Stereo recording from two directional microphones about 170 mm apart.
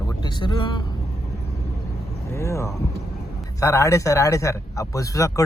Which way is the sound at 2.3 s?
15° left (ahead or behind).